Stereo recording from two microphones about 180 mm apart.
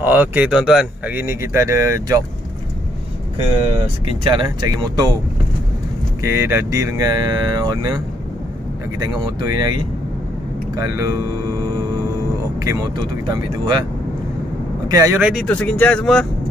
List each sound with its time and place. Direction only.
0.0 s speech: 10° right (ahead or behind)
3.3 s speech: 30° right (ahead or behind)
6.2 s speech: 15° right (ahead or behind)
9.0 s speech: 20° right (ahead or behind)
10.8 s speech: 20° right (ahead or behind)
14.9 s speech: 15° right (ahead or behind)
15.4 s speech: 5° left (ahead or behind)